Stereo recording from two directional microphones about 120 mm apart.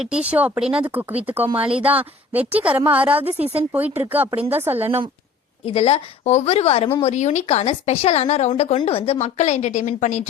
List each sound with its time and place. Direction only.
0.0 s a woman's voice: 10° right (ahead or behind)
1.5 s speech: 50° right (ahead or behind)
2.0 s a woman's voice: 15° right (ahead or behind)
3.2 s a woman's voice: 60° right (ahead or behind)
3.7 s a woman's voice: 15° right (ahead or behind)
5.6 s a woman's voice: 55° left (ahead or behind)
7.0 s speech: 70° left (ahead or behind)